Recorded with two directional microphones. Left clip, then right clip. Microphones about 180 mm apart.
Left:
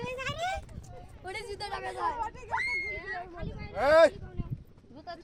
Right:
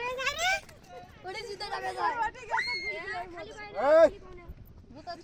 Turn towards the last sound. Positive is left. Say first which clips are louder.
# even
turn(degrees=-5)  # may be behind; listen again after turning